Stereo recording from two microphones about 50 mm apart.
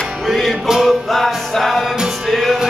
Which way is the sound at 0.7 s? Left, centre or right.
Centre.